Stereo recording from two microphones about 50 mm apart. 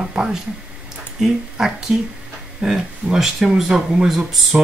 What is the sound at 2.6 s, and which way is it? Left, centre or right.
Speech, centre.